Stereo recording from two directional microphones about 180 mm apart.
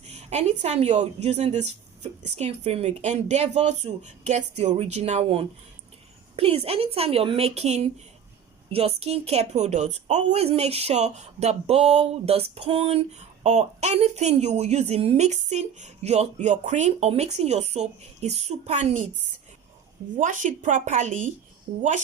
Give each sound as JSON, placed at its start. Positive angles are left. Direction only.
{"t": 0.1, "sound": "a woman's voice", "side_deg": -40}
{"t": 20.1, "sound": "a woman's voice", "side_deg": -45}